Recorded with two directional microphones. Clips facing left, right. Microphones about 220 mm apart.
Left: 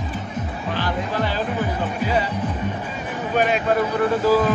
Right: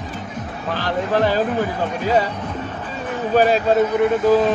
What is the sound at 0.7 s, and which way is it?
Speech, 45° right (ahead or behind).